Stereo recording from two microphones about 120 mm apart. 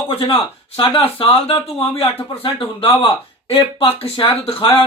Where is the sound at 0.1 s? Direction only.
50° left (ahead or behind).